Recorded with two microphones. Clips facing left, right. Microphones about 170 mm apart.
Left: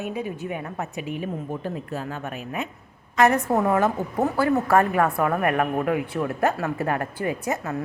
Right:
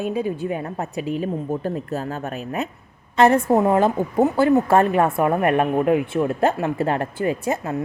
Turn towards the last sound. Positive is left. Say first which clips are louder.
# right 4 dB
turn(degrees=-30)  # may be behind; listen again after turning